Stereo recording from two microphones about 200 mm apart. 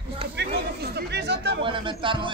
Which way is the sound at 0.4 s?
55° right (ahead or behind).